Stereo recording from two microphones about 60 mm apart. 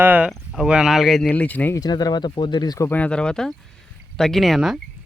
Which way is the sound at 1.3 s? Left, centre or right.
Left.